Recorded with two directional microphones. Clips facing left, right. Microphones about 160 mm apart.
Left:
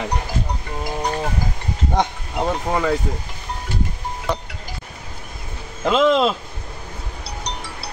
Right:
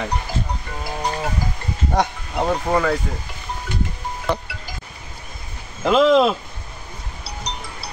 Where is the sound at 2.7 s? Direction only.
15° left (ahead or behind).